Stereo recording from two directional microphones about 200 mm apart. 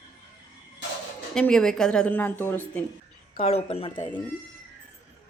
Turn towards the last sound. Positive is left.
turn(degrees=25)  # may be behind; listen again after turning